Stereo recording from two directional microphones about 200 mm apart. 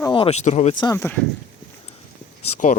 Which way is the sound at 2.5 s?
40° left (ahead or behind).